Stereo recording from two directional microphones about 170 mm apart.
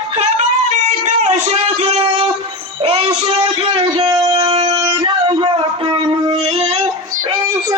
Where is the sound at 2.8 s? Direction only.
35° right (ahead or behind).